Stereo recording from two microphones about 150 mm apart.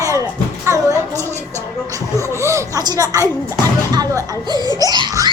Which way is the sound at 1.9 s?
20° right (ahead or behind).